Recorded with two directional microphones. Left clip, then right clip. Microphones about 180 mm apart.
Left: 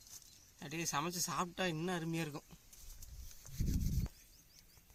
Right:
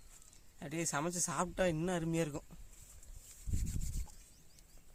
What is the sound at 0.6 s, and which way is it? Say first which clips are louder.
Speech: right 1 dB; 35° right (ahead or behind).